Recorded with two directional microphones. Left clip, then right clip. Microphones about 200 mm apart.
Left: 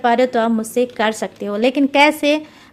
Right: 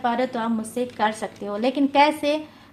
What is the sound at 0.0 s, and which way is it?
A woman's voice, 45° left (ahead or behind).